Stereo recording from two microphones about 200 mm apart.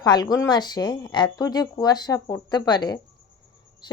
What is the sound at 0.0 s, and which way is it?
Speech, 20° left (ahead or behind).